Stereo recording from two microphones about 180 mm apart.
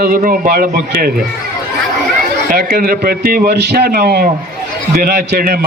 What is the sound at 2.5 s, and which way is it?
Speech, 55° right (ahead or behind).